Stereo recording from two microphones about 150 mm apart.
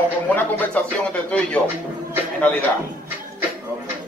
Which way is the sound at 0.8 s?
10° left (ahead or behind).